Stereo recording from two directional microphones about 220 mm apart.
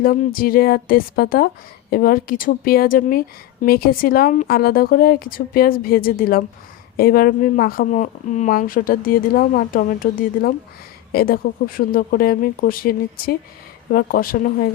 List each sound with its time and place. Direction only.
0.0 s a woman's voice: 40° left (ahead or behind)